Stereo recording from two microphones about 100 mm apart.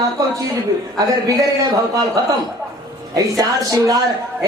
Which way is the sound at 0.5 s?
35° right (ahead or behind).